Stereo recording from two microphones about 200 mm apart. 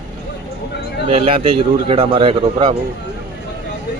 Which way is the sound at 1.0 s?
30° right (ahead or behind).